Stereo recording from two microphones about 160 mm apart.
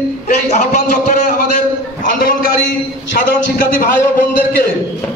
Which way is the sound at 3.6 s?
60° left (ahead or behind).